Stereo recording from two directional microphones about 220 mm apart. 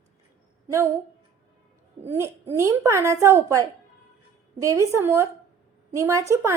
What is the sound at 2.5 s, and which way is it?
A woman's voice, 15° right (ahead or behind).